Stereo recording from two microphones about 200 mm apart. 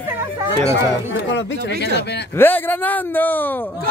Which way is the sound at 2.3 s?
10° left (ahead or behind).